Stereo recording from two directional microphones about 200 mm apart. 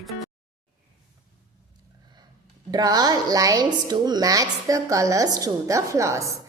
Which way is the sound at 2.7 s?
20° right (ahead or behind).